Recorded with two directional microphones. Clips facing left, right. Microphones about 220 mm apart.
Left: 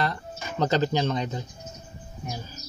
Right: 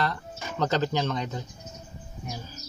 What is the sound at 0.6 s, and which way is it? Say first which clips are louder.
Speech: left 2 dB; 15° left (ahead or behind).